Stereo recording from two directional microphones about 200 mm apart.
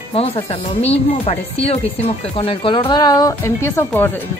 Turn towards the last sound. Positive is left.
turn(degrees=10)  # may be behind; listen again after turning